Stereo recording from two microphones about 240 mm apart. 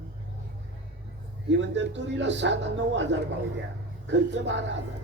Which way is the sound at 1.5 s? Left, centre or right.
Right.